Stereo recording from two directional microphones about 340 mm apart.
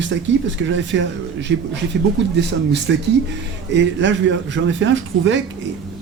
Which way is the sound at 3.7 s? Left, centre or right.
Right.